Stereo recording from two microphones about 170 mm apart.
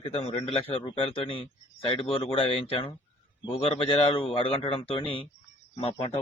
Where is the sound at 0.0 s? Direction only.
35° left (ahead or behind).